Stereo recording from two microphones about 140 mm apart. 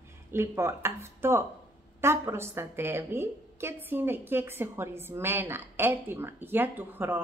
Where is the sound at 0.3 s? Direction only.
20° right (ahead or behind).